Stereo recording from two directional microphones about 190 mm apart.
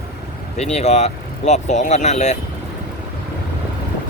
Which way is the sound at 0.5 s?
35° left (ahead or behind).